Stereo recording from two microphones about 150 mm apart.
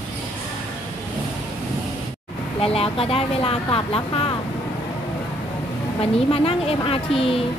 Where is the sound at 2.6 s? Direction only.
40° left (ahead or behind).